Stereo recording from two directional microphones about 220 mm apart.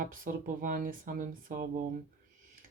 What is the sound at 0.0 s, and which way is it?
Speech, 35° right (ahead or behind).